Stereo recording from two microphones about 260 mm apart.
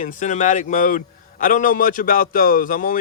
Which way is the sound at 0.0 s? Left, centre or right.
Left.